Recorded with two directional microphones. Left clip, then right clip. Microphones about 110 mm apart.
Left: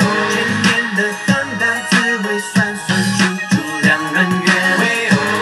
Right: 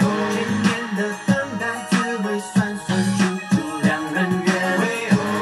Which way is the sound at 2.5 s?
25° left (ahead or behind).